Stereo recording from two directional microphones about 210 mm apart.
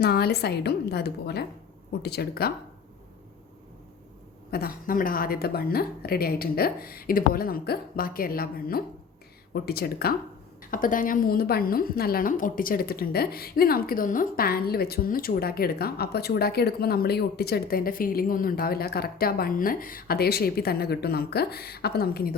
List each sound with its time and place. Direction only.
0.0 s a woman's voice: 50° left (ahead or behind)
4.5 s a woman's voice: 45° left (ahead or behind)